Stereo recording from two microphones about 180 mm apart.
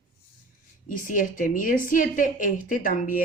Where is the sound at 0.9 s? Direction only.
50° left (ahead or behind).